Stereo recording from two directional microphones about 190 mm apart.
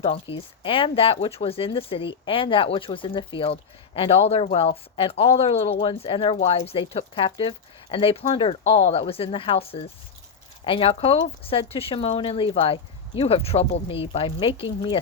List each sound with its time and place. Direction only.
0.0 s speech: 30° left (ahead or behind)